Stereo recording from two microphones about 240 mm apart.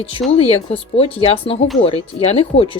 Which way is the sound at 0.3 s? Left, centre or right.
Left.